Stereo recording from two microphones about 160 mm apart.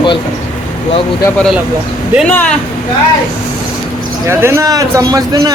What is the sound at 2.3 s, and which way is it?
Speech, 10° left (ahead or behind).